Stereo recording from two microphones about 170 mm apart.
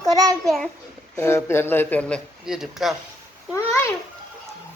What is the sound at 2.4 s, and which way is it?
Speech, 5° right (ahead or behind).